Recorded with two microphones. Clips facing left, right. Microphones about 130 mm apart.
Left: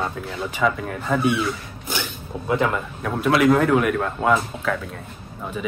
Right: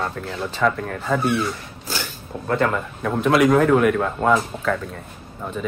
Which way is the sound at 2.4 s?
5° left (ahead or behind).